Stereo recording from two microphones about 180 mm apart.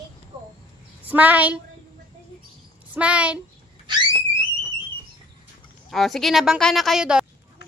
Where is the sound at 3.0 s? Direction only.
5° right (ahead or behind).